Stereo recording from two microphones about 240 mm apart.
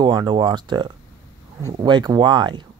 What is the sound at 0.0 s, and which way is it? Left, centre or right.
Speech, centre.